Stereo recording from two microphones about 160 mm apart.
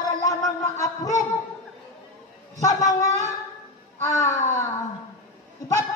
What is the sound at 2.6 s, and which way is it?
Speech, 20° left (ahead or behind).